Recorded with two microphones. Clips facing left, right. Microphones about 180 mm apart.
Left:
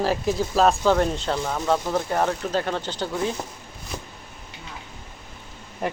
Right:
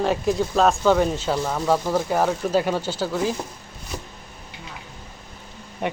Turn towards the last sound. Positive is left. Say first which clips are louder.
# right 1 dB
turn(degrees=0)  # may be behind; listen again after turning